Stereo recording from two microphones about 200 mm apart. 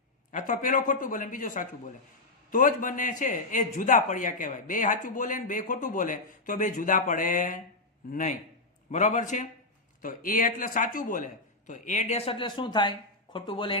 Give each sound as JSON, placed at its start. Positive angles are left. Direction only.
{"t": 0.3, "sound": "a man's voice", "side_deg": 40}